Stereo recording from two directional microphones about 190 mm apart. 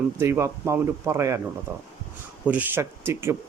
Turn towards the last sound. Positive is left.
turn(degrees=-15)  # may be behind; listen again after turning